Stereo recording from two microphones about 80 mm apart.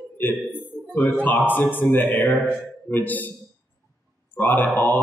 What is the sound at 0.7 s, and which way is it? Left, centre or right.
A man's voice, left.